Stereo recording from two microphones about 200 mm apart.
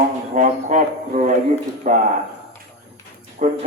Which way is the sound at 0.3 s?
40° right (ahead or behind).